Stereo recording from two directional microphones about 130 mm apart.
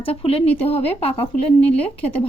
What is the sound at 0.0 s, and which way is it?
Speech, 45° left (ahead or behind).